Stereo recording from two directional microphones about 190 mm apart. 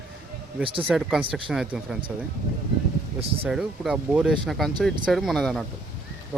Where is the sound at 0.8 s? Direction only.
5° right (ahead or behind).